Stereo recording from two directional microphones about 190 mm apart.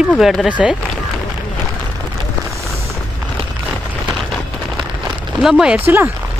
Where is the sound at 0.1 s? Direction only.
Centre (ahead or behind).